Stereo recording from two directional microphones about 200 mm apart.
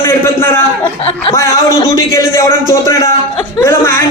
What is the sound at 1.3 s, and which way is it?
A man's voice, 15° left (ahead or behind).